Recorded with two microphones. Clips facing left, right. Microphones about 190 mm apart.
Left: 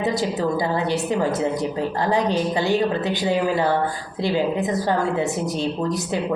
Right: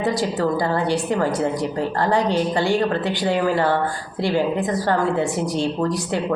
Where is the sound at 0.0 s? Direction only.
20° left (ahead or behind).